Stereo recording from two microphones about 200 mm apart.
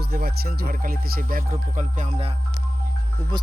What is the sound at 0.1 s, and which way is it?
Speech, 50° right (ahead or behind).